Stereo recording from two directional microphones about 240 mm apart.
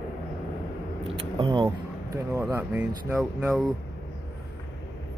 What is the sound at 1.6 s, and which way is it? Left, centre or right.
Speech, centre.